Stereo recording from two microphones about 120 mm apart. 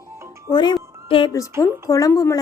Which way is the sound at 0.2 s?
25° right (ahead or behind).